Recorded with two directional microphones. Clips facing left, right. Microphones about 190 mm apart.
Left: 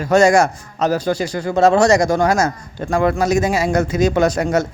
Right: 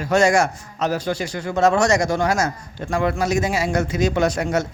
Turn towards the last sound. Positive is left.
turn(degrees=40)  # may be behind; listen again after turning